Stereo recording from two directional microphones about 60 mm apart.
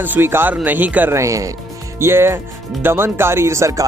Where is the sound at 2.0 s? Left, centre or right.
Right.